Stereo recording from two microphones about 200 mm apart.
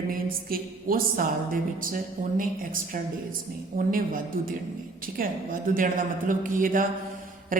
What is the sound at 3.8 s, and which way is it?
A woman's voice, 45° right (ahead or behind).